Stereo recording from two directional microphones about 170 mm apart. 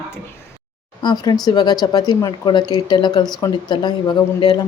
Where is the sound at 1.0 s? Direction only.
25° left (ahead or behind).